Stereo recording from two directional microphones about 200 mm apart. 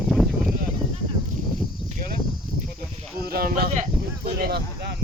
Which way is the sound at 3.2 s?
50° right (ahead or behind).